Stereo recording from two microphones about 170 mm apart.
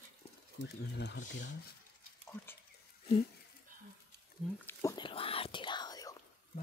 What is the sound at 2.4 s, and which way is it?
Whispering, 10° left (ahead or behind).